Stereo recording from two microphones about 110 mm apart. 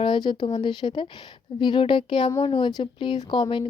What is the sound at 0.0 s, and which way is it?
A woman's voice, 45° left (ahead or behind).